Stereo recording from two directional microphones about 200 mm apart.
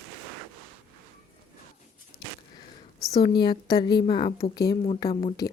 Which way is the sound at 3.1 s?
20° left (ahead or behind).